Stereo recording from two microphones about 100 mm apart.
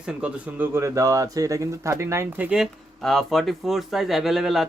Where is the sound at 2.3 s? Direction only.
10° right (ahead or behind).